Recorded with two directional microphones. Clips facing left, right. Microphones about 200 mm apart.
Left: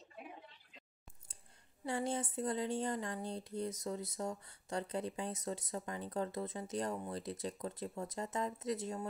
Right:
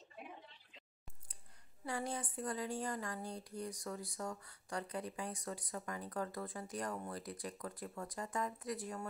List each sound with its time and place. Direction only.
1.9 s speech: 25° left (ahead or behind)